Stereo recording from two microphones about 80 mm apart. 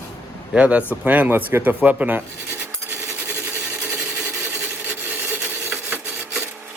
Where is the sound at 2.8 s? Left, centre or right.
Right.